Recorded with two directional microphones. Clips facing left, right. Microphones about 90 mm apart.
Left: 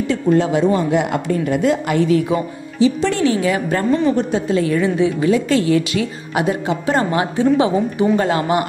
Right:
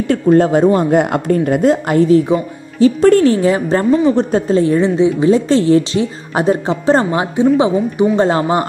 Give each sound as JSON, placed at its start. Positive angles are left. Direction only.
{"t": 0.1, "sound": "a woman's voice", "side_deg": -45}
{"t": 2.8, "sound": "a woman's voice", "side_deg": -45}
{"t": 7.1, "sound": "a woman's voice", "side_deg": -20}